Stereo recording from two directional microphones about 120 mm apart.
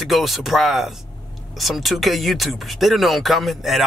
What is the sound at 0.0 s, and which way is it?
Speech, centre (ahead or behind).